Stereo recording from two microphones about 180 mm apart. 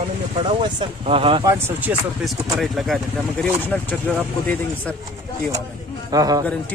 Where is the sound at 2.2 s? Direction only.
Centre (ahead or behind).